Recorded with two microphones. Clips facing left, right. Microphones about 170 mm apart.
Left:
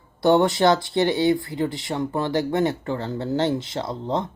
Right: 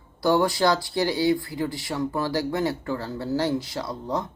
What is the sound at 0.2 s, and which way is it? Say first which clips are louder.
Speech: left 3 dB; 25° left (ahead or behind).